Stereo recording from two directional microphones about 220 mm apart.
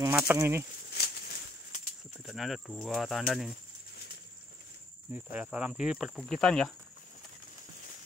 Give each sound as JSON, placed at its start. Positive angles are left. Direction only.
{"t": 0.0, "sound": "speech", "side_deg": -10}
{"t": 0.9, "sound": "a sound", "side_deg": 45}
{"t": 2.2, "sound": "speech", "side_deg": 0}
{"t": 5.1, "sound": "speech", "side_deg": -5}